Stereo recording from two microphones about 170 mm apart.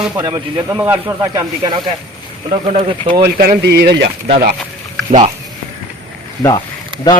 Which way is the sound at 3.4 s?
65° right (ahead or behind).